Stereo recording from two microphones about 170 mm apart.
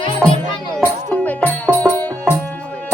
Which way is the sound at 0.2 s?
15° right (ahead or behind).